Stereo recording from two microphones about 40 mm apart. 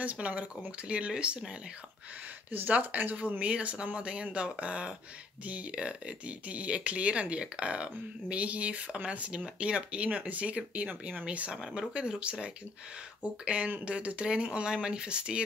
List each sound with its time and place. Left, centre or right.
0.0 s speech: right
2.5 s speech: right
11.5 s speech: centre
11.9 s speech: right